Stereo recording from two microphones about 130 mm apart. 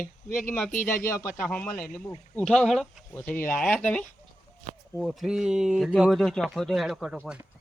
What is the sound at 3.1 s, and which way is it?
Speech, 15° left (ahead or behind).